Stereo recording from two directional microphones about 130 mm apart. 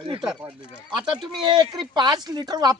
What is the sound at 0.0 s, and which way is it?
Speech, 45° right (ahead or behind).